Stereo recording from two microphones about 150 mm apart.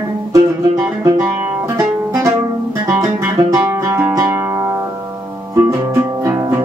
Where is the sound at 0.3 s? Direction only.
20° right (ahead or behind).